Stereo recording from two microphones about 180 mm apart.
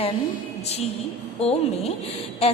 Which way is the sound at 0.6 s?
35° left (ahead or behind).